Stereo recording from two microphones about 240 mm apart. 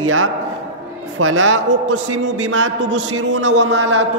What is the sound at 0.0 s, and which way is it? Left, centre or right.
A man's voice, right.